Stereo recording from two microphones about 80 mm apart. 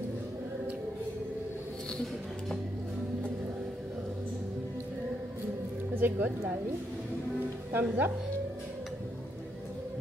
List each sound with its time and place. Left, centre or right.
5.9 s speech: centre
7.7 s speech: right